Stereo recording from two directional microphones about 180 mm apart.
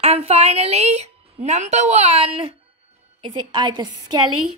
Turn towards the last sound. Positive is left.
turn(degrees=-25)  # may be behind; listen again after turning